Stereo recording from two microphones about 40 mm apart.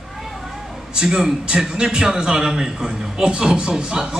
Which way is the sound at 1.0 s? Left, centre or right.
Centre.